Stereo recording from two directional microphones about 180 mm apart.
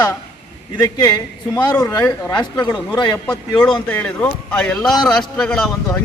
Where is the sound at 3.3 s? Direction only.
5° left (ahead or behind).